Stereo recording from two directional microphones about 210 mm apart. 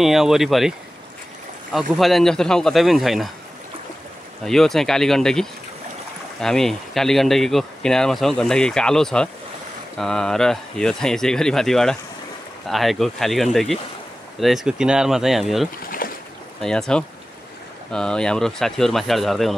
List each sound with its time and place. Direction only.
0.0 s speech: centre (ahead or behind)
4.5 s speech: centre (ahead or behind)
15.8 s boat: 45° left (ahead or behind)
16.6 s speech: 5° left (ahead or behind)